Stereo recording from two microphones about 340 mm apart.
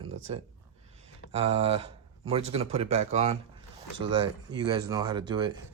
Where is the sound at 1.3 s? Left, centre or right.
Centre.